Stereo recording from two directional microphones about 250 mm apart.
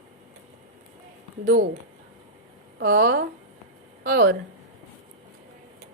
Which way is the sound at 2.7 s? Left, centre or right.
Right.